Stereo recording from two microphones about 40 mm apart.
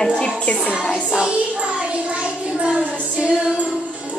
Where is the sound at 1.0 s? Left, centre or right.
Centre.